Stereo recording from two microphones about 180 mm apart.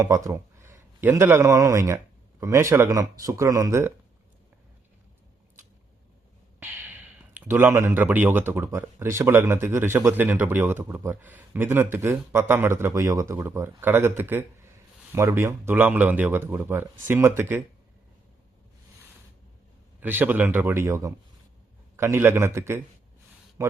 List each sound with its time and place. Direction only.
0.0 s a man's voice: 20° right (ahead or behind)
6.6 s speech: 10° right (ahead or behind)
20.0 s speech: 10° right (ahead or behind)